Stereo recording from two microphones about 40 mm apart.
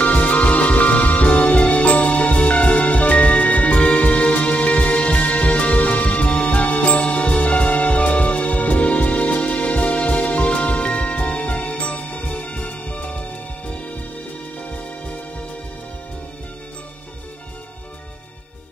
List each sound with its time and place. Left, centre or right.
0.0 s music: left